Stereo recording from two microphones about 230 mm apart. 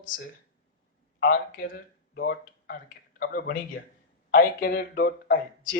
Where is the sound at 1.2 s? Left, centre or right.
Left.